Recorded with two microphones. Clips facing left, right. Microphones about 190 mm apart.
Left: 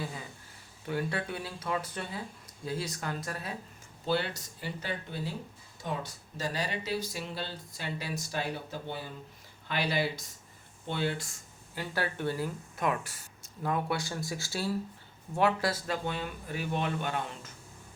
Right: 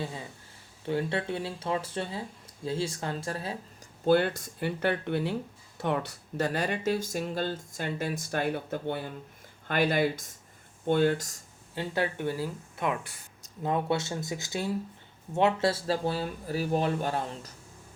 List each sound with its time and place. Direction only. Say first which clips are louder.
0.0 s speech: right 3 dB; 25° right (ahead or behind)
4.0 s speech: right 8 dB; 50° right (ahead or behind)
11.7 s speech: right 4 dB; 25° right (ahead or behind)